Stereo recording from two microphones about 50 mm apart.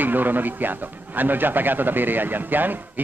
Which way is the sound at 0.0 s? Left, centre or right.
Right.